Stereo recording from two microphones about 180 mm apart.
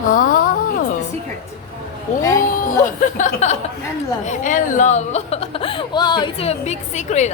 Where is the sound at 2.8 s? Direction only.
45° left (ahead or behind).